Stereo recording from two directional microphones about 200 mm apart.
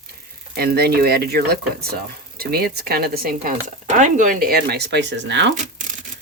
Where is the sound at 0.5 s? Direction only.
50° right (ahead or behind).